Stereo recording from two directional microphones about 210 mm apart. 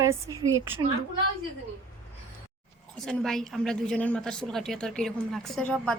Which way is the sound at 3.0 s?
Centre (ahead or behind).